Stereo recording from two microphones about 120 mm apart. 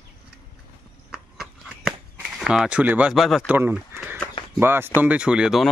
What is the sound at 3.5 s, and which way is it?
Speech, 15° right (ahead or behind).